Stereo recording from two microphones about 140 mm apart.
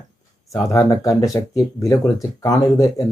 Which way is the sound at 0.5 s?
25° left (ahead or behind).